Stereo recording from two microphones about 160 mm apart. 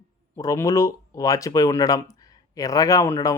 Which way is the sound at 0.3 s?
20° left (ahead or behind).